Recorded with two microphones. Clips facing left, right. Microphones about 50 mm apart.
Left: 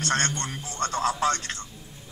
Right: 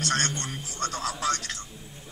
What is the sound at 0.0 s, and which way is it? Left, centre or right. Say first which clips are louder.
Speech: left 2 dB; left.